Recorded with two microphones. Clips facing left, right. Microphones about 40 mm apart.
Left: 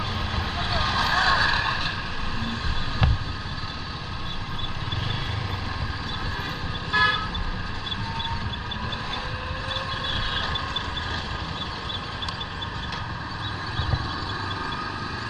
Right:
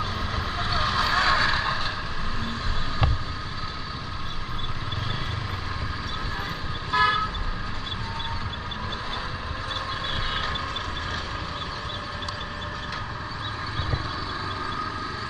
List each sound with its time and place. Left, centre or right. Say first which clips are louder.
0.6 s vehicle: right 1 dB; left
0.9 s vehicle: left 1 dB; left
6.9 s toot: even; left